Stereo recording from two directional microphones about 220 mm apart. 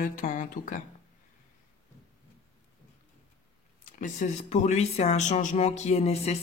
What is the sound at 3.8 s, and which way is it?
Speech, 35° left (ahead or behind).